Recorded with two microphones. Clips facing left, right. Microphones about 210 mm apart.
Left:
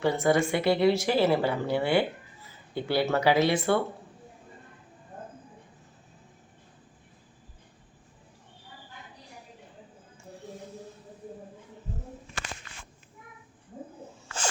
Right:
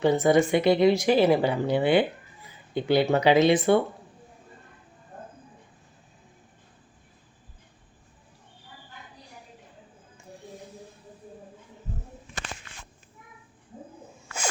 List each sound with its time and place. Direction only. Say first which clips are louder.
0.0 s speech: right 4 dB; 20° right (ahead or behind)